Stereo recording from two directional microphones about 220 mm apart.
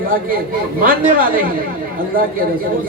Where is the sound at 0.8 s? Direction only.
40° right (ahead or behind).